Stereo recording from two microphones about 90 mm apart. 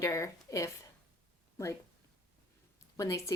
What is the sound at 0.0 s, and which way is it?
Speech, 35° left (ahead or behind).